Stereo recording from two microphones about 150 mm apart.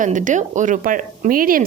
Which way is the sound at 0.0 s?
60° right (ahead or behind).